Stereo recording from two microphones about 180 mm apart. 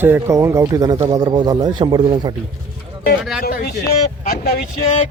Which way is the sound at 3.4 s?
60° left (ahead or behind).